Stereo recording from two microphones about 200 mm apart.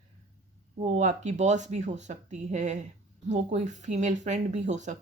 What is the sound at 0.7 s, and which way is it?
Speech, 35° right (ahead or behind).